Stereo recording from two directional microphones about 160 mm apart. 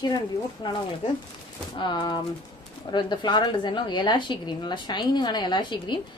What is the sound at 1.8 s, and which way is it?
Speech, 30° left (ahead or behind).